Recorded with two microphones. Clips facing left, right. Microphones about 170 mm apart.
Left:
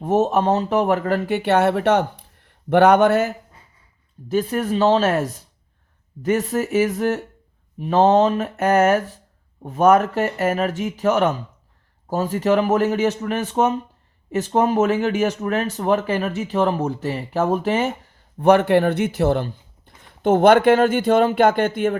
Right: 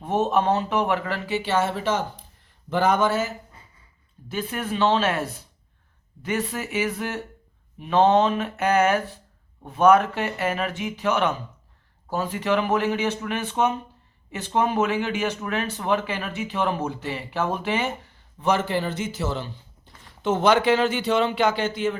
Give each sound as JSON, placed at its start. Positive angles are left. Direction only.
{"t": 0.0, "sound": "speech", "side_deg": 40}
{"t": 4.3, "sound": "speech", "side_deg": 40}